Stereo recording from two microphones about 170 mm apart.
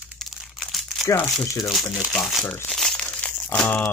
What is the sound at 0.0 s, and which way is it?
Crumpling, centre (ahead or behind).